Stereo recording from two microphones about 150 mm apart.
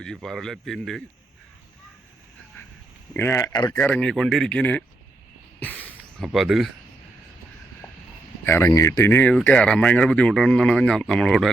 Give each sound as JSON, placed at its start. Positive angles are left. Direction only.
{"t": 0.0, "sound": "speech", "side_deg": 5}
{"t": 3.1, "sound": "speech", "side_deg": 15}
{"t": 3.8, "sound": "speech", "side_deg": 10}
{"t": 5.5, "sound": "a sound", "side_deg": 10}
{"t": 6.2, "sound": "speech", "side_deg": 0}
{"t": 8.4, "sound": "speech", "side_deg": 15}